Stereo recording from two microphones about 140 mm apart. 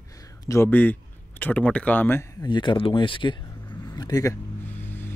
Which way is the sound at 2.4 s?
35° left (ahead or behind).